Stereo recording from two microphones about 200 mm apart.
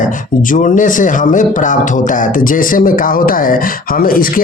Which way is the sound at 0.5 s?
40° left (ahead or behind).